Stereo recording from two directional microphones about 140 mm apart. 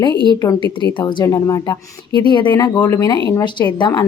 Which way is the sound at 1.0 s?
25° left (ahead or behind).